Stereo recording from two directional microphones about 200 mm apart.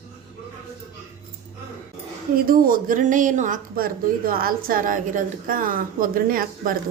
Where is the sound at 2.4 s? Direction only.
45° right (ahead or behind).